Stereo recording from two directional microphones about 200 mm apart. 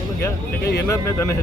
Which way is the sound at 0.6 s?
50° left (ahead or behind).